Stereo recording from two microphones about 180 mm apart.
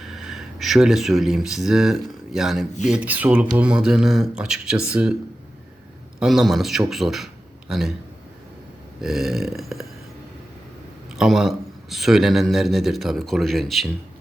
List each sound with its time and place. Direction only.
0.0 s a man's voice: centre (ahead or behind)
6.1 s a man's voice: centre (ahead or behind)
9.0 s a man's voice: centre (ahead or behind)
11.2 s a man's voice: centre (ahead or behind)